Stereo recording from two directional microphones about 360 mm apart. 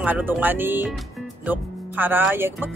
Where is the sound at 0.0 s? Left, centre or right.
Centre.